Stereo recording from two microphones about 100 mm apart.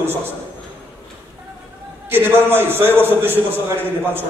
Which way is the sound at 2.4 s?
20° right (ahead or behind).